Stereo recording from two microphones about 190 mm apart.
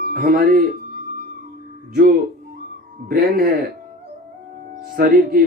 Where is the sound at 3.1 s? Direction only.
50° right (ahead or behind).